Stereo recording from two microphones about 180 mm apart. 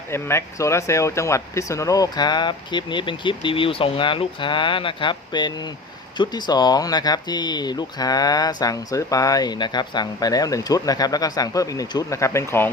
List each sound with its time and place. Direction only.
0.1 s speech: 15° left (ahead or behind)